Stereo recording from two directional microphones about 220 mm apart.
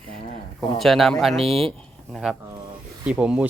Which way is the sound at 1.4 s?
25° right (ahead or behind).